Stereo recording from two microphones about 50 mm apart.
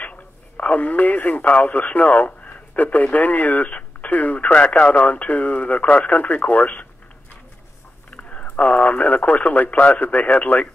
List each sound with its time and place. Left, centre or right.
0.0 s speech: left
8.2 s speech: left